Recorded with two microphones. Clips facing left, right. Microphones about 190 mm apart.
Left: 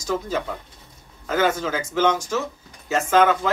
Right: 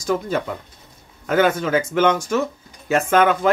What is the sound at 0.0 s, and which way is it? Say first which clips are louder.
Speech: right 3 dB; 60° right (ahead or behind).